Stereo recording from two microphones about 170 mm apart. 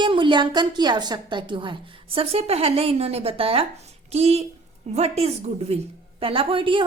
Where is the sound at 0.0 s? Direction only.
30° right (ahead or behind).